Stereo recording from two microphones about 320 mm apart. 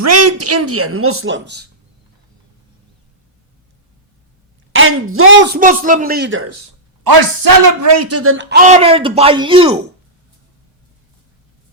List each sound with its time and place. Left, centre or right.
0.0 s speech: right
4.7 s speech: right
5.5 s a man's voice: right
7.0 s a man's voice: right; by 9.7 s centre